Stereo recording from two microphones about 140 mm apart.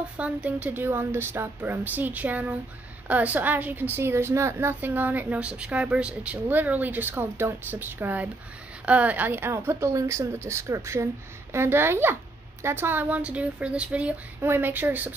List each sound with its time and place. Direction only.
0.2 s a woman's voice: 10° right (ahead or behind)